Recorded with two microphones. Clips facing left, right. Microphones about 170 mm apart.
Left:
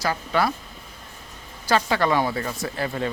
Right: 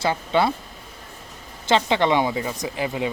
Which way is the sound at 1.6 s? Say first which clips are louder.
Right 2 dB; 20° right (ahead or behind).